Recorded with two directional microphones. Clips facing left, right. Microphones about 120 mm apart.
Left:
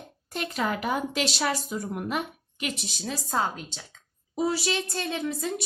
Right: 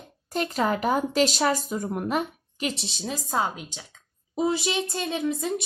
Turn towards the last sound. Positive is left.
turn(degrees=-20)  # may be behind; listen again after turning